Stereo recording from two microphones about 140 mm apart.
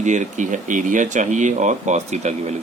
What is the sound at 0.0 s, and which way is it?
Speech, 60° right (ahead or behind).